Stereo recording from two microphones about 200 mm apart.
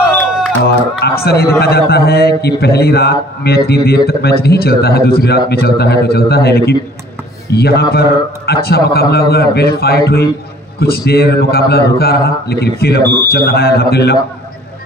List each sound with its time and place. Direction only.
0.9 s a man's voice: 55° left (ahead or behind)